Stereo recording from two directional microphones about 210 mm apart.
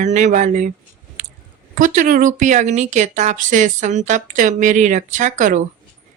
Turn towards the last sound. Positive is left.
turn(degrees=-35)  # may be behind; listen again after turning